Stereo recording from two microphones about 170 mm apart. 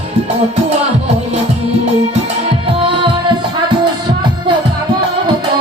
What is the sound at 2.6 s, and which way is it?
Music, 30° right (ahead or behind).